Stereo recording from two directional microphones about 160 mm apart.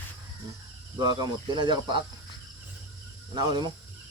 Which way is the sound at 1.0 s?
25° right (ahead or behind).